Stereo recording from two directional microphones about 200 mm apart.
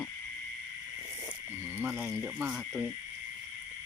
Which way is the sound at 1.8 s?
5° right (ahead or behind).